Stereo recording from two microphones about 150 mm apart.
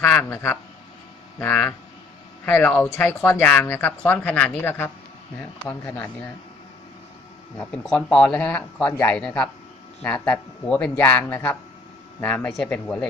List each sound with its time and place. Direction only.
0.0 s a man's voice: 5° left (ahead or behind)
0.3 s speech: 15° left (ahead or behind)
7.5 s speech: 10° left (ahead or behind)